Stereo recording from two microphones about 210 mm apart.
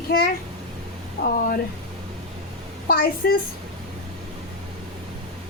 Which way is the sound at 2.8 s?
45° left (ahead or behind).